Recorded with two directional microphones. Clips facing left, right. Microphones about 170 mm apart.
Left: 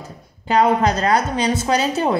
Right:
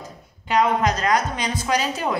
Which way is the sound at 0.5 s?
35° left (ahead or behind).